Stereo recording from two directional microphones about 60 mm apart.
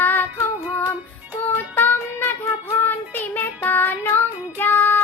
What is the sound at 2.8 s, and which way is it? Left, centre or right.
Child singing, left.